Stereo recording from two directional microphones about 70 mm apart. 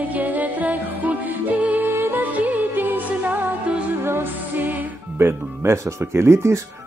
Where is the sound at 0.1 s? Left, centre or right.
Right.